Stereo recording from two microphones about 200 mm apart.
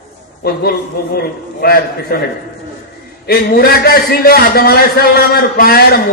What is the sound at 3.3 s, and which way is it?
A man's voice, 50° left (ahead or behind).